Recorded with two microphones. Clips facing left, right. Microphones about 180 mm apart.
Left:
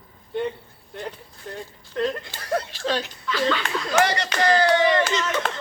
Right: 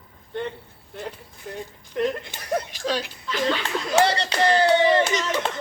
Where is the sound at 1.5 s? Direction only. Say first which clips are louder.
Right 1 dB; 10° right (ahead or behind).